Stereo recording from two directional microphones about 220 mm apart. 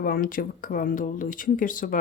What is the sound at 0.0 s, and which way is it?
Speech, 40° left (ahead or behind).